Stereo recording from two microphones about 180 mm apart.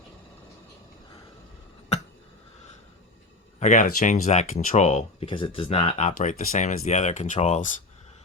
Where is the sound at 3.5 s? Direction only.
45° left (ahead or behind).